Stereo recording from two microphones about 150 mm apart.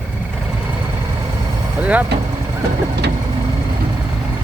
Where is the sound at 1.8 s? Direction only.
10° right (ahead or behind).